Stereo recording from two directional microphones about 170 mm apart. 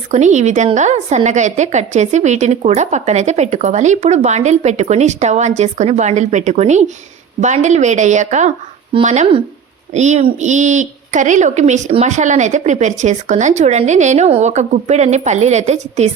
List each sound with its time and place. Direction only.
0.1 s a woman's voice: 45° right (ahead or behind)